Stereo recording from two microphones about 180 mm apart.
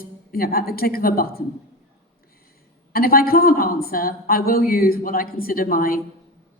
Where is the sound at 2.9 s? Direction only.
55° left (ahead or behind).